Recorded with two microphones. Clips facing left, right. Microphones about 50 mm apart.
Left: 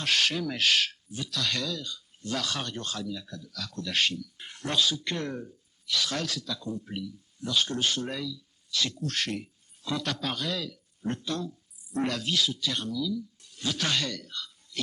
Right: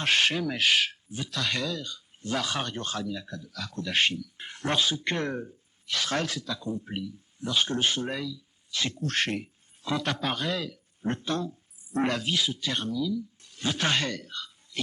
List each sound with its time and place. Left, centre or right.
0.0 s speech: right
0.5 s speech: centre